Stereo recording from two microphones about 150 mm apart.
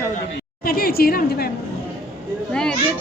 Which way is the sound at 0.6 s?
90° left.